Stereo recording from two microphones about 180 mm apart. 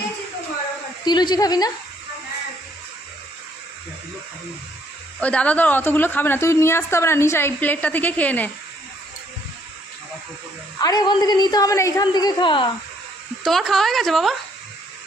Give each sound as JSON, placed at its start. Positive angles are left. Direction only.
{"t": 1.0, "sound": "a woman's voice", "side_deg": 25}
{"t": 5.2, "sound": "a woman's voice", "side_deg": 5}
{"t": 10.8, "sound": "a woman's voice", "side_deg": 20}
{"t": 13.4, "sound": "a woman's voice", "side_deg": 0}